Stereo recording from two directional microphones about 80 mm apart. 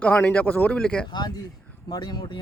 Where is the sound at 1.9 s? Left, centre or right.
Left.